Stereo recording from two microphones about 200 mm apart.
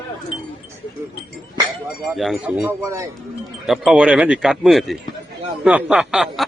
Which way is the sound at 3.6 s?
Centre (ahead or behind).